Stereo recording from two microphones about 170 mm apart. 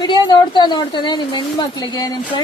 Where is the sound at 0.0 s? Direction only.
25° left (ahead or behind).